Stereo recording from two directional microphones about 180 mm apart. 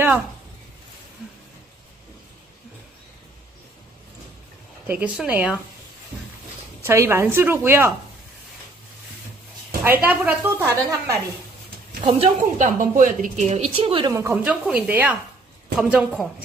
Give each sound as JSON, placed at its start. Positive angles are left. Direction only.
{"t": 4.8, "sound": "a woman's voice", "side_deg": -10}
{"t": 6.8, "sound": "a woman's voice", "side_deg": -15}
{"t": 10.0, "sound": "a woman's voice", "side_deg": -10}
{"t": 12.0, "sound": "a woman's voice", "side_deg": -30}
{"t": 14.1, "sound": "a woman's voice", "side_deg": -10}